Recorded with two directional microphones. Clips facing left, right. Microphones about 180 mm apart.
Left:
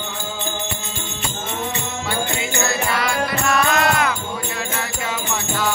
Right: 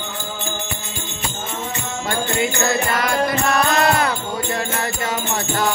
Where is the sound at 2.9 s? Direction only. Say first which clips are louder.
Right 2 dB; 45° right (ahead or behind).